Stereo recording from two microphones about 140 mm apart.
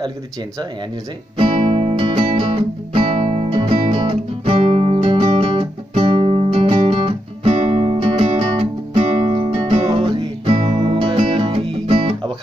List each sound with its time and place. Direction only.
1.4 s music: 40° right (ahead or behind)
9.2 s music: 35° right (ahead or behind)